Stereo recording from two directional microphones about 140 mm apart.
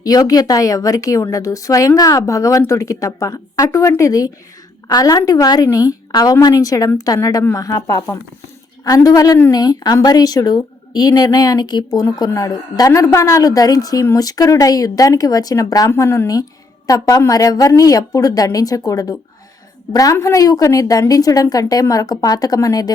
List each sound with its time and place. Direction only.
0.0 s speech: 25° left (ahead or behind)